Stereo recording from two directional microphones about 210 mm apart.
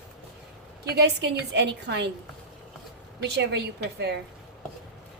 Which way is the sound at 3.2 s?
55° right (ahead or behind).